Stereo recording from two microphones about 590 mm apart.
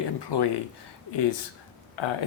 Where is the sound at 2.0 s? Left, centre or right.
Left.